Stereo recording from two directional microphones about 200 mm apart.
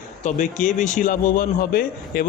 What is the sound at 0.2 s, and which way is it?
A man's voice, 40° left (ahead or behind).